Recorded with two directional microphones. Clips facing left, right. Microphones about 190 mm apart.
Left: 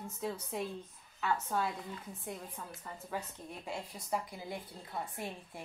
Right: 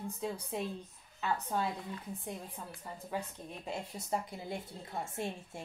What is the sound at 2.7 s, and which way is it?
Speech, 20° right (ahead or behind).